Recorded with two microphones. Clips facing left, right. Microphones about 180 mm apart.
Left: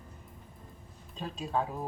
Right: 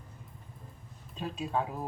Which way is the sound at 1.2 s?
5° right (ahead or behind).